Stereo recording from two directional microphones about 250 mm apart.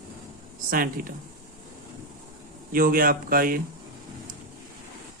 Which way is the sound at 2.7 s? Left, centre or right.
Right.